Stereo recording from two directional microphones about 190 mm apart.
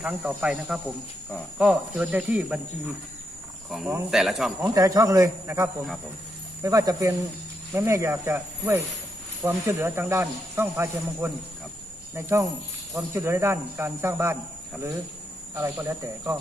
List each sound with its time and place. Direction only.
0.0 s speech: 5° right (ahead or behind)
3.7 s cricket: centre (ahead or behind)
4.1 s speech: centre (ahead or behind)
4.7 s speech: 15° right (ahead or behind)
15.5 s speech: 15° right (ahead or behind)